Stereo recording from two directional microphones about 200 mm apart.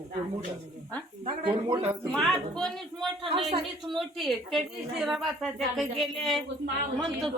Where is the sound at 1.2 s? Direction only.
25° right (ahead or behind).